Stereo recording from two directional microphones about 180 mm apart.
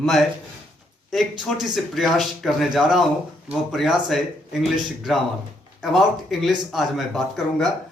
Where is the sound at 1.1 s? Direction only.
Centre (ahead or behind).